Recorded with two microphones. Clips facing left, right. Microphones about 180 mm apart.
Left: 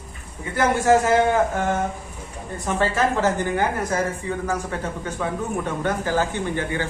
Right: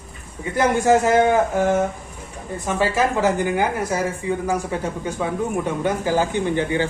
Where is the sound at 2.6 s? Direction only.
10° right (ahead or behind).